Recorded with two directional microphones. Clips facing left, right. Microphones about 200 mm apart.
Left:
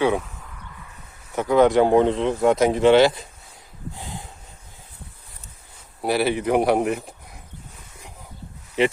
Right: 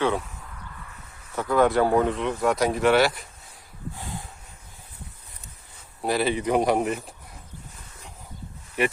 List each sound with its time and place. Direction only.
1.4 s speech: 20° left (ahead or behind)
6.0 s speech: 10° left (ahead or behind)